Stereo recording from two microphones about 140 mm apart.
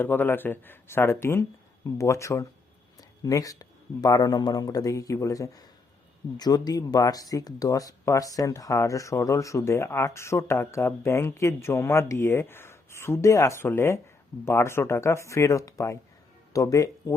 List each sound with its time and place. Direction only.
0.0 s speech: 15° left (ahead or behind)